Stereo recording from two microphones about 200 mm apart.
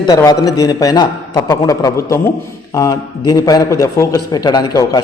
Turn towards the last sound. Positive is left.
turn(degrees=20)  # may be behind; listen again after turning